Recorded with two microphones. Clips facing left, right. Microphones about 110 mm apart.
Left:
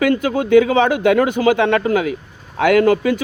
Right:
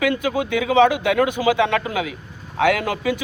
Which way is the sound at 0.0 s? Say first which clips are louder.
Left 4 dB; 50° left (ahead or behind).